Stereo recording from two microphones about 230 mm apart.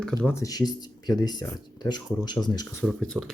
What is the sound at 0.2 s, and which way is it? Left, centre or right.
Speech, centre.